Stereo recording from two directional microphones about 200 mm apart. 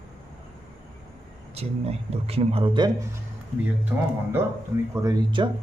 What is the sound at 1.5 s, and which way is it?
Speech, 30° right (ahead or behind).